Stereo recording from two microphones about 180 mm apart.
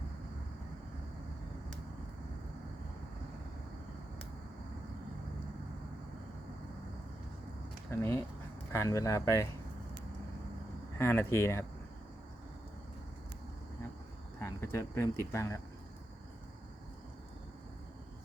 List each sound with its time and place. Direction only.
7.9 s speech: 15° left (ahead or behind)
10.9 s speech: 15° left (ahead or behind)
14.4 s speech: 15° left (ahead or behind)